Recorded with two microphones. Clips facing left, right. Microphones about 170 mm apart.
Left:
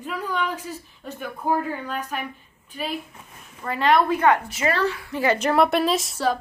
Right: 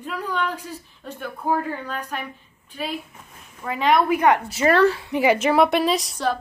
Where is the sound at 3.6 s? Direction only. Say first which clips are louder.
Even; centre (ahead or behind).